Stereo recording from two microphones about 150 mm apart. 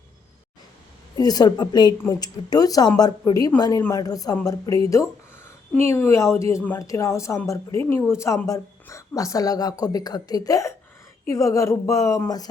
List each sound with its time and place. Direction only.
1.1 s speech: 25° left (ahead or behind)
5.9 s speech: 20° left (ahead or behind)